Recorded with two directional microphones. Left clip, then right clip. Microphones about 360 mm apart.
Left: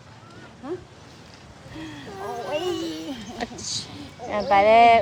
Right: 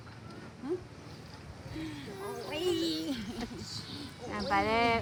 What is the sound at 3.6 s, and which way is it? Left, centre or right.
Speech, left.